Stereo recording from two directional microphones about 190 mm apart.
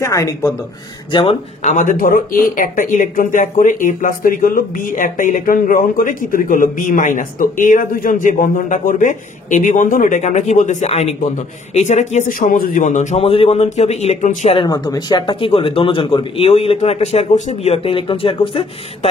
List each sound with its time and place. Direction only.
0.0 s speech: 15° left (ahead or behind)
1.1 s speech: 35° left (ahead or behind)